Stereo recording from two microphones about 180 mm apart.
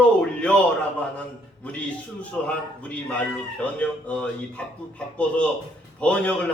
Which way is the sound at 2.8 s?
5° left (ahead or behind).